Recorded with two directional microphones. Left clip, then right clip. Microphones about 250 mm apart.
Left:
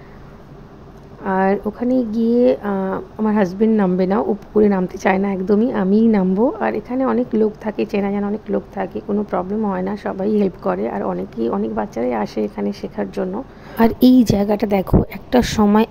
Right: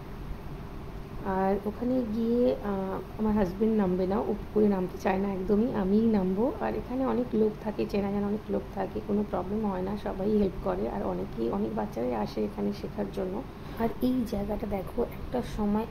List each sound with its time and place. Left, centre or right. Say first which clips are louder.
1.2 s speech: left 11 dB; left